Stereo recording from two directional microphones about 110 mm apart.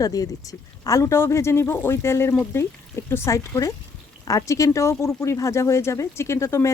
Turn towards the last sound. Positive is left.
turn(degrees=25)  # may be behind; listen again after turning